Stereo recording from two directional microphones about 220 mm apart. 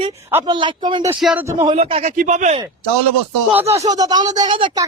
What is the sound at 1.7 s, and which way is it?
Speech, 30° right (ahead or behind).